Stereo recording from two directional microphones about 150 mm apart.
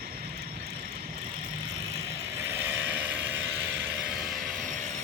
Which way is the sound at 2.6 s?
10° right (ahead or behind).